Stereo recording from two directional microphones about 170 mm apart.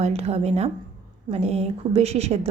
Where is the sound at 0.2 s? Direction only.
40° right (ahead or behind).